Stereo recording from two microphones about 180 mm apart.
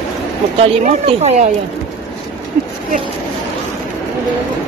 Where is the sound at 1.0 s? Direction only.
35° right (ahead or behind).